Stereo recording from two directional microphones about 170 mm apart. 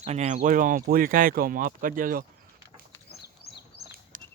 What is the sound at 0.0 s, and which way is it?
Speech, 40° right (ahead or behind).